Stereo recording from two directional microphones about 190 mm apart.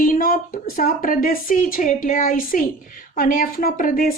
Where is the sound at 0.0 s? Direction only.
45° left (ahead or behind).